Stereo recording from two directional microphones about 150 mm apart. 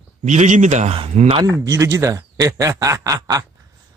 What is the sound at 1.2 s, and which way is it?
Speech, 40° right (ahead or behind).